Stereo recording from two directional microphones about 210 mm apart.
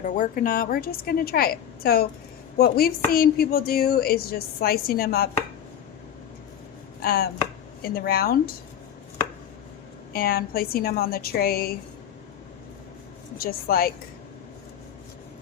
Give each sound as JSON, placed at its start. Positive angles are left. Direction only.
{"t": 0.0, "sound": "a woman's voice", "side_deg": 40}
{"t": 7.0, "sound": "chopping", "side_deg": 45}
{"t": 7.8, "sound": "a woman's voice", "side_deg": 45}
{"t": 10.1, "sound": "a woman's voice", "side_deg": 45}
{"t": 13.4, "sound": "a woman's voice", "side_deg": 45}